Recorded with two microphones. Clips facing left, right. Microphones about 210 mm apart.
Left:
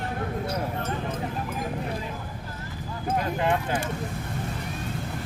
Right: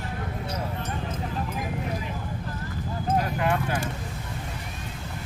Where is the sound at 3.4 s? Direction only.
20° left (ahead or behind).